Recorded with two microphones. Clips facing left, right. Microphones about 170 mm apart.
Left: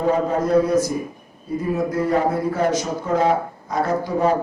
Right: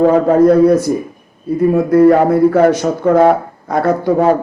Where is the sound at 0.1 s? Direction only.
60° right (ahead or behind).